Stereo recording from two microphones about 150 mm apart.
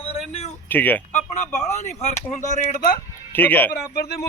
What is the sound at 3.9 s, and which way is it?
Speech, 90° left.